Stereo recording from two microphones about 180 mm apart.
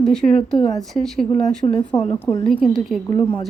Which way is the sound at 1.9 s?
20° left (ahead or behind).